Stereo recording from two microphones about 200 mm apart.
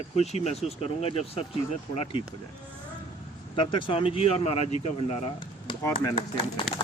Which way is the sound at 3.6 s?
25° left (ahead or behind).